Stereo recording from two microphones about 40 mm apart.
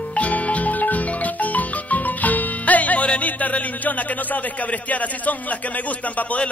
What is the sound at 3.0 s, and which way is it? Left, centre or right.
A man's voice, left.